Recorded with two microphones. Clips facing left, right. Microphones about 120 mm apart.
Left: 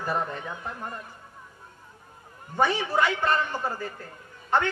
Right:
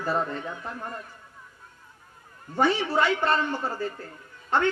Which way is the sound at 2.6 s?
15° left (ahead or behind).